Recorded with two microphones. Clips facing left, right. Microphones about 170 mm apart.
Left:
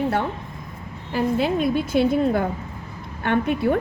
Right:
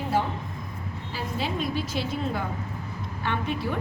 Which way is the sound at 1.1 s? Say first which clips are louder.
Left 10 dB; 55° left (ahead or behind).